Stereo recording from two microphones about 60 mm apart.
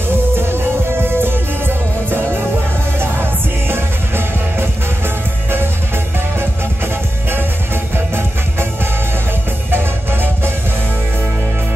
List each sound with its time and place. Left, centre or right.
0.4 s music: right
6.8 s music: right
9.7 s music: right